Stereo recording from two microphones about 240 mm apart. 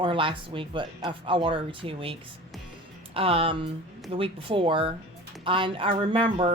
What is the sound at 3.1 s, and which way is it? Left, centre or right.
Speech, right.